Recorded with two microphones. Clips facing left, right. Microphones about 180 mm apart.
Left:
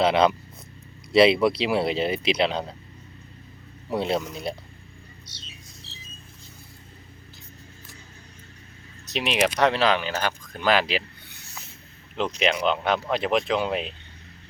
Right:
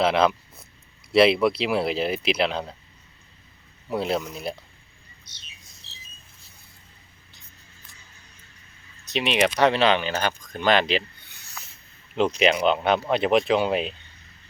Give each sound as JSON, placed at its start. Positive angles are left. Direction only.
{"t": 0.0, "sound": "speech", "side_deg": 0}
{"t": 3.8, "sound": "speech", "side_deg": 0}
{"t": 9.0, "sound": "speech", "side_deg": 0}
{"t": 11.6, "sound": "snake", "side_deg": 25}
{"t": 12.1, "sound": "speech", "side_deg": -5}